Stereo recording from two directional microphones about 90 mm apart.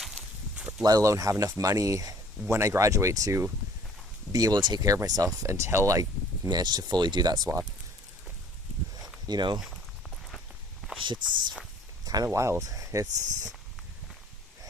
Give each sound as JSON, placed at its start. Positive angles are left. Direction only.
{"t": 0.0, "sound": "a sound", "side_deg": 0}
{"t": 0.9, "sound": "speech", "side_deg": -40}
{"t": 4.3, "sound": "speech", "side_deg": -45}
{"t": 9.2, "sound": "speech", "side_deg": -55}
{"t": 11.0, "sound": "speech", "side_deg": -60}
{"t": 12.0, "sound": "speech", "side_deg": -45}